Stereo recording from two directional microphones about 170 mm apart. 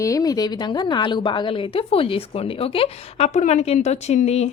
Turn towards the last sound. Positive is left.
turn(degrees=40)  # may be behind; listen again after turning